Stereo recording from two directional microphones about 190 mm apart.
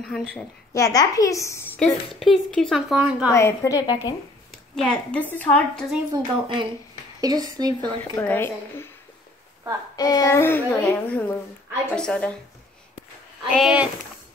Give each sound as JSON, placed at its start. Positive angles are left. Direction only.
{"t": 0.0, "sound": "a woman's voice", "side_deg": 5}
{"t": 0.7, "sound": "a woman's voice", "side_deg": 15}
{"t": 1.8, "sound": "a woman's voice", "side_deg": 0}
{"t": 3.3, "sound": "a woman's voice", "side_deg": 15}
{"t": 4.5, "sound": "speech", "side_deg": 5}
{"t": 6.1, "sound": "speech", "side_deg": -25}
{"t": 7.8, "sound": "a woman's voice", "side_deg": 10}
{"t": 9.9, "sound": "a woman's voice", "side_deg": 20}
{"t": 13.5, "sound": "a woman's voice", "side_deg": -5}